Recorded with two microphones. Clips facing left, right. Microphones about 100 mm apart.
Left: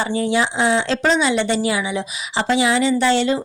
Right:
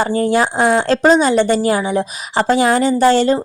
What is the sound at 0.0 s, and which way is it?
A woman's voice, 45° right (ahead or behind).